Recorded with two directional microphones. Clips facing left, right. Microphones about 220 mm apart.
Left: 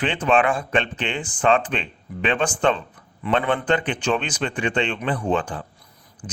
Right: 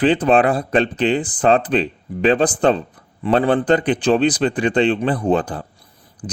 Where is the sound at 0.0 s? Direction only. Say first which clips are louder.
Right 6 dB; 35° right (ahead or behind).